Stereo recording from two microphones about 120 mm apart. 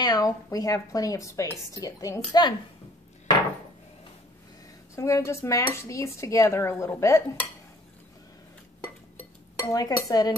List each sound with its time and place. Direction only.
0.0 s a woman's voice: 35° left (ahead or behind)
4.9 s a woman's voice: 25° left (ahead or behind)
9.6 s dishes: 30° left (ahead or behind)